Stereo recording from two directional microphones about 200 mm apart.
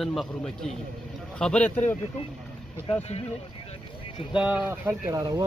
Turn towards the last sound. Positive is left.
turn(degrees=-10)  # may be behind; listen again after turning